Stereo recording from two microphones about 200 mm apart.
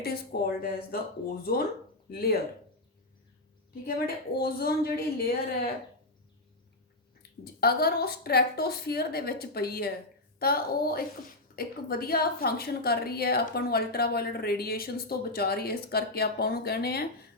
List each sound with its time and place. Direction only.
0.0 s a woman's voice: 50° left (ahead or behind)
3.8 s a woman's voice: 50° left (ahead or behind)
7.2 s a woman's voice: 50° left (ahead or behind)